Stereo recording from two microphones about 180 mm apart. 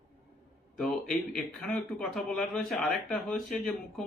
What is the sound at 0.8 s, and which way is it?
A man's voice, centre (ahead or behind).